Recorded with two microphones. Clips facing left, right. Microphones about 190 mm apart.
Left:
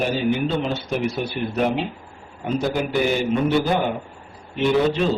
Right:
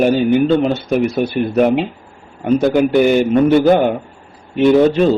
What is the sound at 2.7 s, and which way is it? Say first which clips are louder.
Speech: right 10 dB; 60° right (ahead or behind).